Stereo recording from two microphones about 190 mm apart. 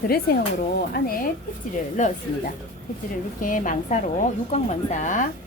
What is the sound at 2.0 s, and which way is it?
Speech, 40° left (ahead or behind).